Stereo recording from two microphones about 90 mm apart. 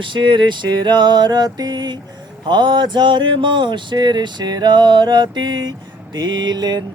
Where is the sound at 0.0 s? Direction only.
65° right (ahead or behind).